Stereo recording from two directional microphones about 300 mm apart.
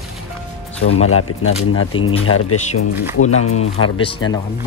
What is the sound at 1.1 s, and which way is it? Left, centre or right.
Speech, left.